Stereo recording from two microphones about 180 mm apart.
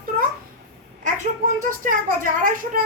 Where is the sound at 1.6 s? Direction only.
50° right (ahead or behind).